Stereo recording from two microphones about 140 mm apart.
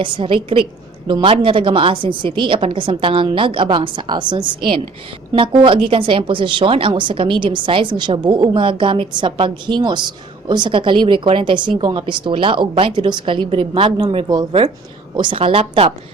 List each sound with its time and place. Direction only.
0.0 s speech: 35° right (ahead or behind)